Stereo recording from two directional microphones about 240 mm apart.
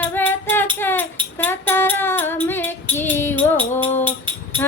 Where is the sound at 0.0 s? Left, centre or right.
Centre.